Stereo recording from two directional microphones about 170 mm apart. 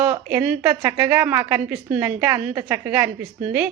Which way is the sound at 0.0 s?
10° right (ahead or behind).